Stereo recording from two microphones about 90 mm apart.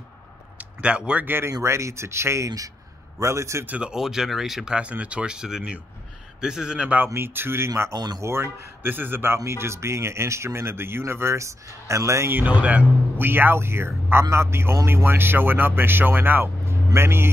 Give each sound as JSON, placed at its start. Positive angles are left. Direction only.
{"t": 0.6, "sound": "a sound", "side_deg": -15}
{"t": 1.2, "sound": "speech", "side_deg": -25}
{"t": 3.6, "sound": "speech", "side_deg": -15}
{"t": 7.2, "sound": "speech", "side_deg": -25}
{"t": 7.9, "sound": "speech", "side_deg": -45}
{"t": 8.2, "sound": "speech", "side_deg": -30}